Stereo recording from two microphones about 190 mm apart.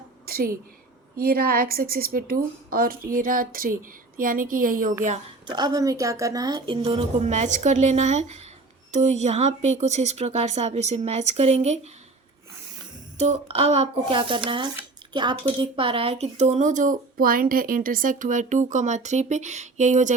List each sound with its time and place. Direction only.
0.3 s a sound: 50° right (ahead or behind)
1.1 s a woman's voice: 55° right (ahead or behind)
5.5 s a woman's voice: 20° right (ahead or behind)
13.1 s a woman's voice: 35° right (ahead or behind)